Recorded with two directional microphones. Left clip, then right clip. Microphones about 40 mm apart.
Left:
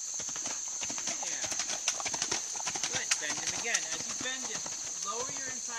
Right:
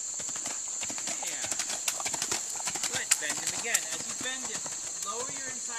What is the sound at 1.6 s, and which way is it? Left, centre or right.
Clip-clop, centre.